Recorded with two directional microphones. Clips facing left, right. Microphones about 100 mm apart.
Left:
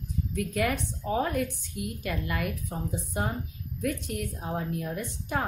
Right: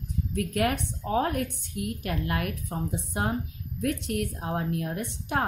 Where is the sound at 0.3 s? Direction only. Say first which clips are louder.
Right 2 dB; 55° right (ahead or behind).